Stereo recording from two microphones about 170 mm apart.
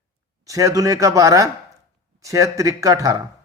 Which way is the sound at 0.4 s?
20° right (ahead or behind).